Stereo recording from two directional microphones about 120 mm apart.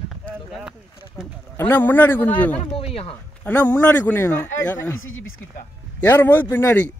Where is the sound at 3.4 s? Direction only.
15° left (ahead or behind).